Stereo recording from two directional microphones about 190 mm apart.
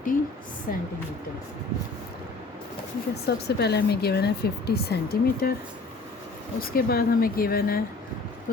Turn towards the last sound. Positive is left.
turn(degrees=50)  # may be behind; listen again after turning